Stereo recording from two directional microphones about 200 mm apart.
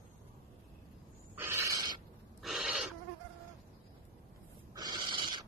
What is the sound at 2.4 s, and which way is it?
Goat, 5° right (ahead or behind).